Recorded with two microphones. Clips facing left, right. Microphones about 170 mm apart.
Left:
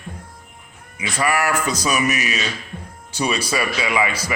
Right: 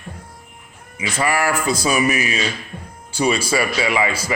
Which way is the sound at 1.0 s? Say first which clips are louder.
Right 1 dB; 30° right (ahead or behind).